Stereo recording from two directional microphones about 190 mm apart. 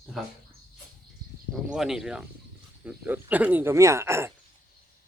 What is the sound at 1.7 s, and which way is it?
Speech, centre (ahead or behind).